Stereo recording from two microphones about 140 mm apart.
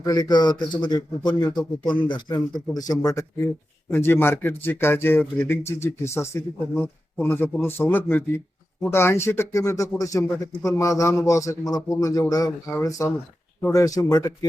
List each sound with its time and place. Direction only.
0.0 s a man's voice: 30° left (ahead or behind)